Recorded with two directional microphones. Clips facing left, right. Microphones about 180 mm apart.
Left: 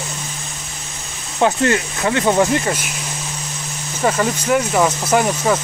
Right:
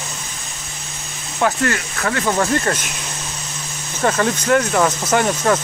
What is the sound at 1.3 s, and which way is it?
Speech, 20° left (ahead or behind).